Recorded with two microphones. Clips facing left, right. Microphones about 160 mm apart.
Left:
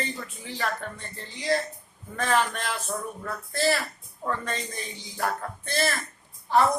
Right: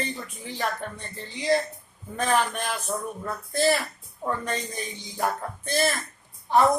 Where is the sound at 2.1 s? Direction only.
15° right (ahead or behind).